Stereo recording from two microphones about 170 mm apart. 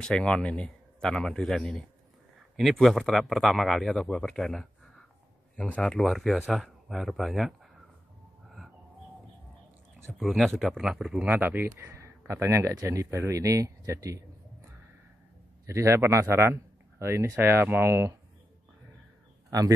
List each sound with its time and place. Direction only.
0.0 s speech: 5° left (ahead or behind)
10.1 s a man's voice: centre (ahead or behind); by 14.2 s 20° right (ahead or behind)
15.6 s a man's voice: 15° right (ahead or behind)